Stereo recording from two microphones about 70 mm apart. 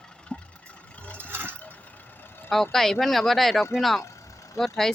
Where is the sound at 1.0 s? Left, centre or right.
Centre.